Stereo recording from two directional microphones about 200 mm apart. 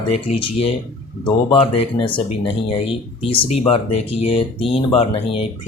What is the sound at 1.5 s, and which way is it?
Speech, 25° left (ahead or behind).